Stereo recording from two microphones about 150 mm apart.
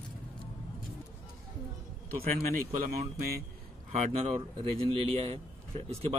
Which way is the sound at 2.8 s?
85° right.